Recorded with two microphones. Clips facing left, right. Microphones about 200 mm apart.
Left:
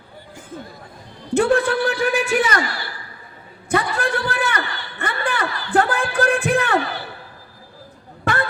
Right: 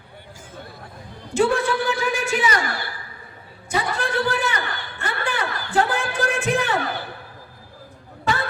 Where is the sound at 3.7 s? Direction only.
55° left (ahead or behind).